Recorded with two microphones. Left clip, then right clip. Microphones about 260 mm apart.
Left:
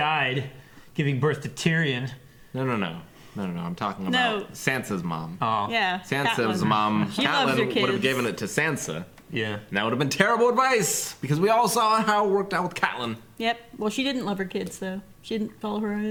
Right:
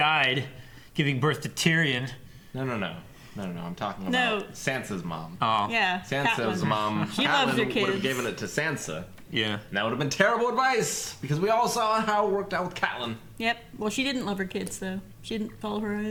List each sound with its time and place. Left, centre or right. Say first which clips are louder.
0.0 s a sound: right 1 dB; left
0.9 s speech: left 1 dB; left
2.6 s speech: left 4 dB; right
4.1 s speech: left 2 dB; left
4.5 s speech: left 3 dB; right
5.4 s speech: right 1 dB; left
5.7 s speech: left 1 dB; centre
6.3 s speech: left 3 dB; right
7.6 s speech: left 2 dB; centre
8.0 s speech: left 4 dB; right
9.3 s speech: right 1 dB; left
9.7 s speech: left 3 dB; right
13.4 s speech: left 2 dB; centre